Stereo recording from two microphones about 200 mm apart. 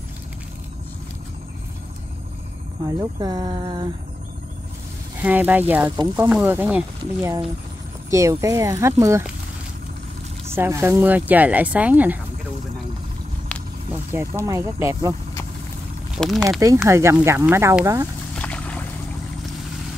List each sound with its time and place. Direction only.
2.9 s speech: 20° right (ahead or behind)
5.2 s speech: 10° right (ahead or behind)
10.5 s speech: 15° right (ahead or behind)
14.4 s speech: 15° right (ahead or behind)
16.2 s speech: centre (ahead or behind)
16.6 s speech: 15° right (ahead or behind)
18.3 s a sound: 5° left (ahead or behind)